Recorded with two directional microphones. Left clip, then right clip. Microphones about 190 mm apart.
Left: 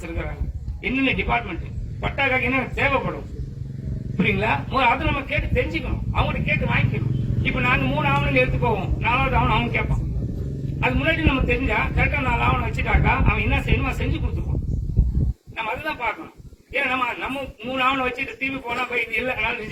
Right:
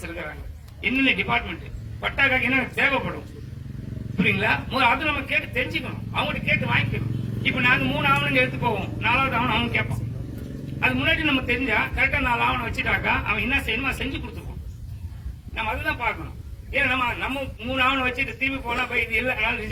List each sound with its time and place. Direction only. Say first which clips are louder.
0.0 s a sound: left 1 dB; 25° right (ahead or behind)
0.8 s a man's voice: right 1 dB; 25° right (ahead or behind)
4.2 s a man's voice: even; 25° right (ahead or behind)
15.5 s a man's voice: even; 30° right (ahead or behind)